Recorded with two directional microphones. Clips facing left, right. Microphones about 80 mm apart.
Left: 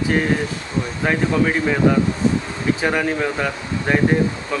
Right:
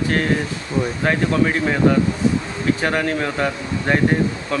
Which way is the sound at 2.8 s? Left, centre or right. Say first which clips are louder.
Left 1 dB; centre.